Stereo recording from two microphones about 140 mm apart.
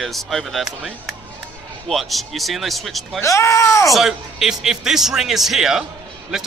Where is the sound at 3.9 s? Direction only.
Centre (ahead or behind).